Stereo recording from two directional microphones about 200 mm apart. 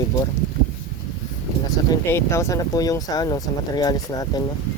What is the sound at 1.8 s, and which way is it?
Speech, 20° left (ahead or behind).